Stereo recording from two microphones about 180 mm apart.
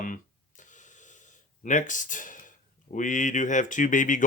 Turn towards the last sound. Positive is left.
turn(degrees=45)  # may be behind; listen again after turning